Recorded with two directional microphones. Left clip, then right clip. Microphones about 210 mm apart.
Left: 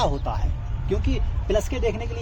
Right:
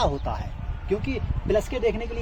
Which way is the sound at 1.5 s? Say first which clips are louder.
Right 1 dB; 15° left (ahead or behind).